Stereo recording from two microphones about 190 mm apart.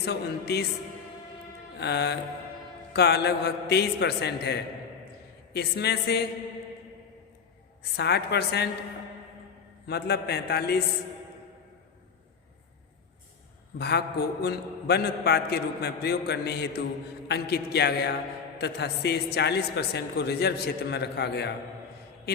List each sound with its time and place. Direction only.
0.0 s a man's voice: 60° left (ahead or behind)
1.8 s a man's voice: 60° left (ahead or behind)
7.9 s a man's voice: 60° left (ahead or behind)
9.8 s a man's voice: 60° left (ahead or behind)
13.7 s a man's voice: 55° left (ahead or behind)